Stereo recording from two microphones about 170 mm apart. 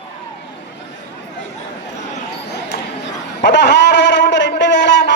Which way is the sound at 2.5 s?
85° left.